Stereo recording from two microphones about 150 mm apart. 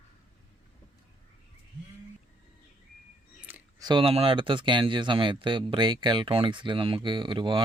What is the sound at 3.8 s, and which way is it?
Speech, 35° right (ahead or behind).